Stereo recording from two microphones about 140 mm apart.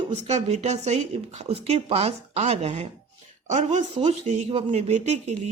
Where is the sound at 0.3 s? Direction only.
50° right (ahead or behind).